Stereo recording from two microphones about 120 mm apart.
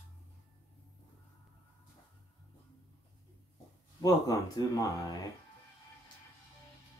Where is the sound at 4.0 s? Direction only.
30° left (ahead or behind).